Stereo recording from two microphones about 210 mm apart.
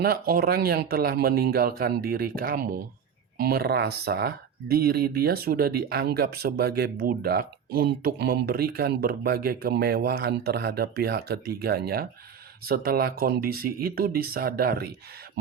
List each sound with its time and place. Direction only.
0.0 s speech: 45° right (ahead or behind)